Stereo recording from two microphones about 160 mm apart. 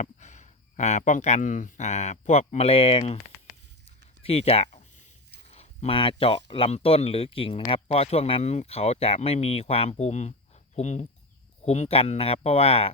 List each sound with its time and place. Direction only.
0.0 s speech: 45° left (ahead or behind)
4.2 s a sound: 40° left (ahead or behind)
5.5 s speech: 40° left (ahead or behind)